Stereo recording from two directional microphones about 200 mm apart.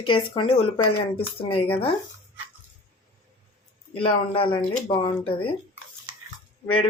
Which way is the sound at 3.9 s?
25° left (ahead or behind).